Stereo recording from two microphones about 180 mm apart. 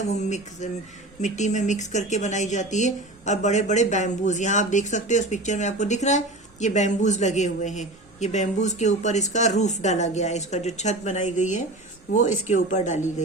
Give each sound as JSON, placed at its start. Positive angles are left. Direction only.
{"t": 0.1, "sound": "speech", "side_deg": 40}